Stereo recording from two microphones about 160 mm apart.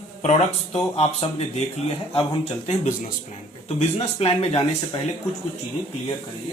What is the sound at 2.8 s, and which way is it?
Speech, 50° left (ahead or behind).